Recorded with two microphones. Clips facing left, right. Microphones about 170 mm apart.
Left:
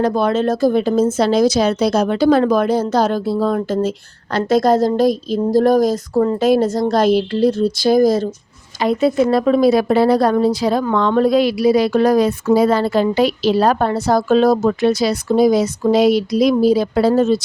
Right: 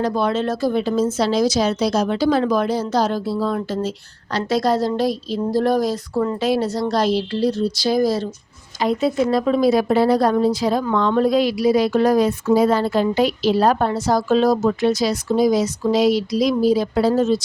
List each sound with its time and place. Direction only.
0.0 s speech: 50° left (ahead or behind)
8.8 s speech: 65° left (ahead or behind)